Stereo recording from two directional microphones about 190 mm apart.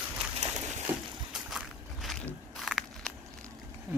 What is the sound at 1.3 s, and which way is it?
Walk, centre (ahead or behind).